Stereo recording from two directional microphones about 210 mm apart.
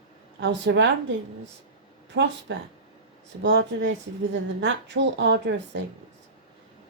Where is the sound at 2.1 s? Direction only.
55° right (ahead or behind).